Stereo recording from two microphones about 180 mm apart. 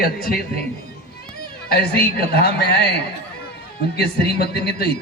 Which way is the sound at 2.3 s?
65° left (ahead or behind).